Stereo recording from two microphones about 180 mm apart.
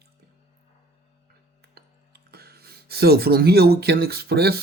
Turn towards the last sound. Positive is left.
turn(degrees=-60)  # may be behind; listen again after turning